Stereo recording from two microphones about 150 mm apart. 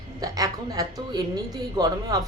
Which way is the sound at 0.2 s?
25° right (ahead or behind).